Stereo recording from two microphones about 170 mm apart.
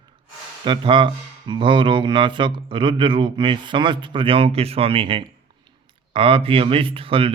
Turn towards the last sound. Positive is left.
turn(degrees=-30)  # may be behind; listen again after turning